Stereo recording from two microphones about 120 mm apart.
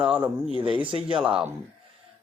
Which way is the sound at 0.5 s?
45° right (ahead or behind).